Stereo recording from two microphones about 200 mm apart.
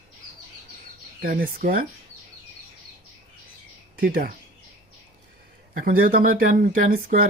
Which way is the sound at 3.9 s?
45° right (ahead or behind).